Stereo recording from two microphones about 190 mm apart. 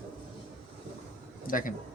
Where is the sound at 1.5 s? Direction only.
45° left (ahead or behind).